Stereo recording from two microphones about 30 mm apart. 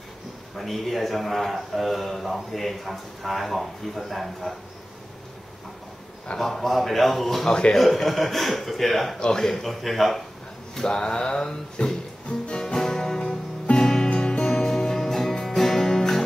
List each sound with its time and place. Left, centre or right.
0.6 s a man's voice: centre
6.3 s a man's voice: centre
9.3 s speech: centre
9.6 s a man's voice: centre
10.9 s music: left
12.7 s music: centre
14.1 s music: left
14.5 s music: centre